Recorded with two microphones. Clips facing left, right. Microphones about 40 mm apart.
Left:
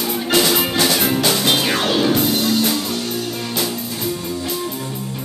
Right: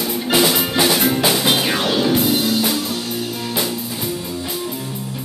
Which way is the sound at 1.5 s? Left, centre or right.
Centre.